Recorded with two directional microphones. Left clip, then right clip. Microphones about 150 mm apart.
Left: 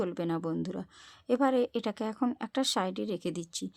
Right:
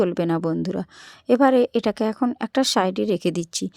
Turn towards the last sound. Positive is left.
turn(degrees=-45)  # may be behind; listen again after turning